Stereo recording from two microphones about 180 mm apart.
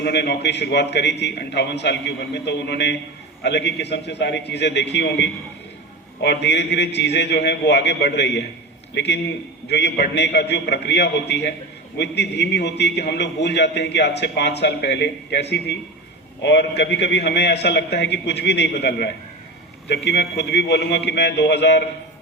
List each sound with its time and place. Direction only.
0.0 s a man's voice: 65° left (ahead or behind)